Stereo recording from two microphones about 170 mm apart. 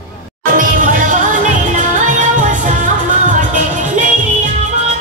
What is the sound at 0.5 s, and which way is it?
Music, 50° right (ahead or behind).